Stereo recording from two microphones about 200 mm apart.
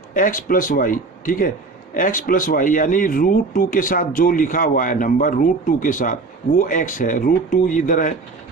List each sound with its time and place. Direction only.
0.1 s a man's voice: 45° left (ahead or behind)